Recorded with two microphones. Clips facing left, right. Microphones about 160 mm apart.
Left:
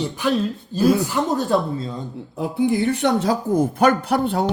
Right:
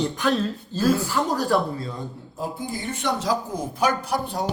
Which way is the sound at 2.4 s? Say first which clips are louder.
Left 11 dB; 65° left (ahead or behind).